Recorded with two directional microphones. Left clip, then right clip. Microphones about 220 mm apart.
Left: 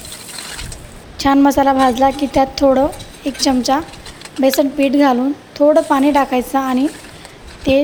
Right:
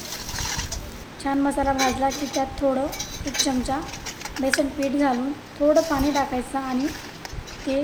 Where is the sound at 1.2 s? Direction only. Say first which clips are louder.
Left 11 dB; 40° left (ahead or behind).